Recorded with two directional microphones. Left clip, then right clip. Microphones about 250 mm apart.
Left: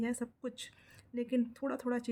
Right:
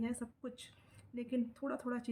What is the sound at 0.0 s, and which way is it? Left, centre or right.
Speech, left.